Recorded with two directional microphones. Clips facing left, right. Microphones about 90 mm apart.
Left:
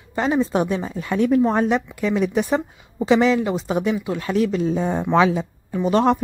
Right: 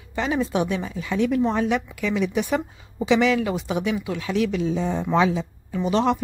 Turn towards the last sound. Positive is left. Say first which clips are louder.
# left 3 dB
turn(degrees=45)  # may be behind; listen again after turning